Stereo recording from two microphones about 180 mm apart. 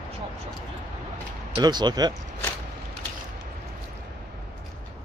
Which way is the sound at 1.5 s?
25° right (ahead or behind).